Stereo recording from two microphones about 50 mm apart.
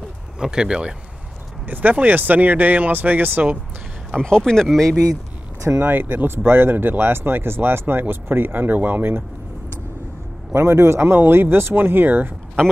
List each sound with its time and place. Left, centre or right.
0.4 s speech: centre
1.7 s speech: right
4.2 s speech: centre
5.8 s speech: right
10.5 s a man's voice: right
11.1 s speech: right